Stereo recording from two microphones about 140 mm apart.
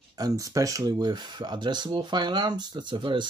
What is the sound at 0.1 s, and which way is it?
Speech, 25° right (ahead or behind).